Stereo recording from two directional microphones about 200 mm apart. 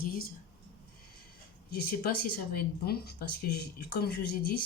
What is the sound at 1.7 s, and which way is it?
Speech, 50° left (ahead or behind).